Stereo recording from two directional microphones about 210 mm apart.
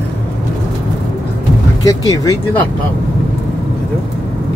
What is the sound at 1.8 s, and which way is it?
Speech, 15° left (ahead or behind).